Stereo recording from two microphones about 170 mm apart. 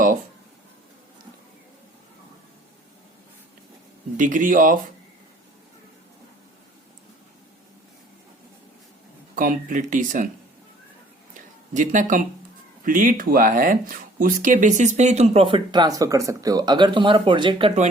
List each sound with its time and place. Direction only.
4.2 s speech: 50° right (ahead or behind)
9.3 s speech: 55° right (ahead or behind)
11.3 s a sound: 50° right (ahead or behind)
12.8 s speech: 50° right (ahead or behind); by 17.7 s 30° right (ahead or behind)